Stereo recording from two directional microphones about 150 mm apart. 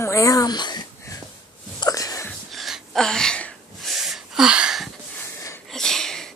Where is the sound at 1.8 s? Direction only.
25° left (ahead or behind).